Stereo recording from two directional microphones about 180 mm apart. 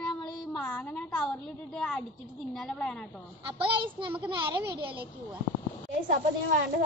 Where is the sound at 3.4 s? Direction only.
30° right (ahead or behind).